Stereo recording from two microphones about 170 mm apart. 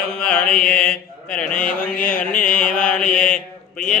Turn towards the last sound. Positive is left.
turn(degrees=55)  # may be behind; listen again after turning